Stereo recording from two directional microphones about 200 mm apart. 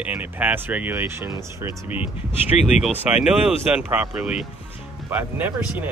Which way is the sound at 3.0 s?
5° right (ahead or behind).